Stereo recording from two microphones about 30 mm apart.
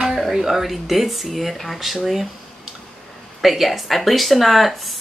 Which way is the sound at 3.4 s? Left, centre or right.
Centre.